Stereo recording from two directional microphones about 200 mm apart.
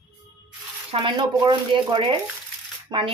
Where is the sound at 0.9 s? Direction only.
25° right (ahead or behind).